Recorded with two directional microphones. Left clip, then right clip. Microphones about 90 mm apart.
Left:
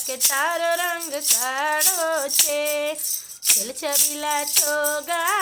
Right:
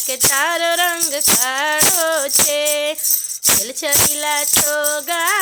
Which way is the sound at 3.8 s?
20° right (ahead or behind).